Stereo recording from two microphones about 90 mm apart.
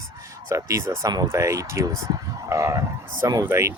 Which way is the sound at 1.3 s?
35° right (ahead or behind).